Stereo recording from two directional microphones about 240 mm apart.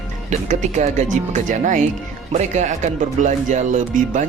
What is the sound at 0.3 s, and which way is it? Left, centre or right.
Speech, right.